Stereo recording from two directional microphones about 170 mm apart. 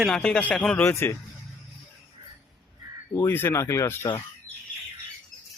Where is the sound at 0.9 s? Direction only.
15° left (ahead or behind).